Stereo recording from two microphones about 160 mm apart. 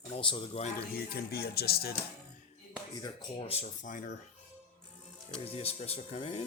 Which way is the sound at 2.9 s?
25° left (ahead or behind).